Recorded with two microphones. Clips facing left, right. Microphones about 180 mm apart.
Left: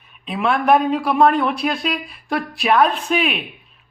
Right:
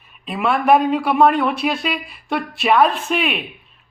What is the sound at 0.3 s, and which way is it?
Speech, 5° right (ahead or behind).